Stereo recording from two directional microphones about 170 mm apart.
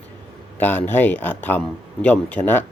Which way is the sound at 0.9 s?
10° left (ahead or behind).